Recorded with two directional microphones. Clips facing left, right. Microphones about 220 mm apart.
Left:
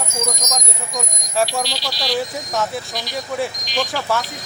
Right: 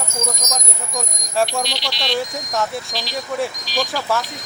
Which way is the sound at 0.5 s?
Centre (ahead or behind).